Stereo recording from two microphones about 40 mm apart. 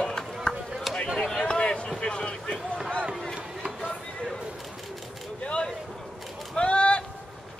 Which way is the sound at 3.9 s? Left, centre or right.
Left.